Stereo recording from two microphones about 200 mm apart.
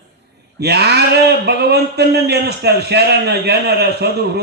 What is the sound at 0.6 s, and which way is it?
Speech, 55° right (ahead or behind).